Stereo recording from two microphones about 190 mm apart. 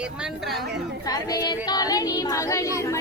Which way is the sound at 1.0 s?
20° left (ahead or behind).